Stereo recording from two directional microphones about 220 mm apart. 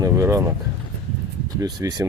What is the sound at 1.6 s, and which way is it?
Speech, 15° right (ahead or behind).